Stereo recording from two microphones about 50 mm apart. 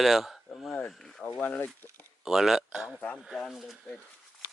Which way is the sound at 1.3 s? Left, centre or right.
Left.